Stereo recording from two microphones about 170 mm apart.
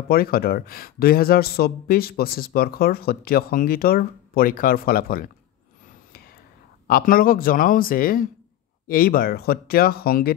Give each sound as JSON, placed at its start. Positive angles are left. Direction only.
{"t": 0.1, "sound": "speech", "side_deg": 60}
{"t": 6.9, "sound": "speech", "side_deg": 60}